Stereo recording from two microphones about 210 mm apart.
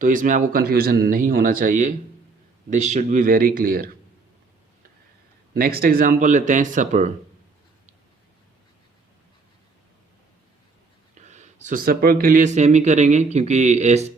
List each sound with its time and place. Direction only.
0.0 s speech: 40° right (ahead or behind)
5.5 s speech: 45° right (ahead or behind)
11.3 s speech: 35° right (ahead or behind)